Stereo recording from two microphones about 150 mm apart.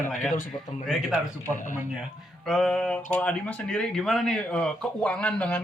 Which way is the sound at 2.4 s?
5° left (ahead or behind).